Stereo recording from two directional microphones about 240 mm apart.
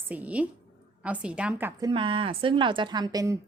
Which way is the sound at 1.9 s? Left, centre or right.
Right.